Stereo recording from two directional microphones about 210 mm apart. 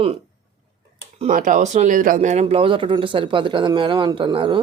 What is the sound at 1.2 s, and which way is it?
Speech, 35° right (ahead or behind).